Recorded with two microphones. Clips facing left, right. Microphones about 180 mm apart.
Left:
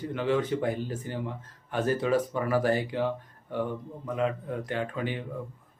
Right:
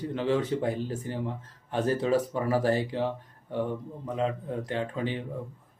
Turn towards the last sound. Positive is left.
turn(degrees=-25)  # may be behind; listen again after turning